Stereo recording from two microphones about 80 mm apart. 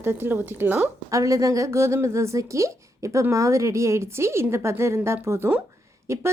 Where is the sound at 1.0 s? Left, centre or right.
Right.